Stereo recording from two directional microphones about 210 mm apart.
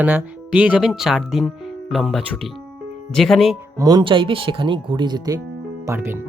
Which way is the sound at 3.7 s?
20° right (ahead or behind).